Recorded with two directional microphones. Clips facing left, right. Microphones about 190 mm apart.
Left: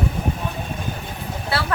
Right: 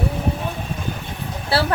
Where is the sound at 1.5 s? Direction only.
30° right (ahead or behind).